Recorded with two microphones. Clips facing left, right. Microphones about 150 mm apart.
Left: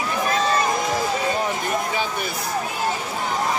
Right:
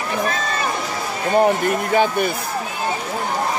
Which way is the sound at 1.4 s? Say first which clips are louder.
Right 6 dB; 55° right (ahead or behind).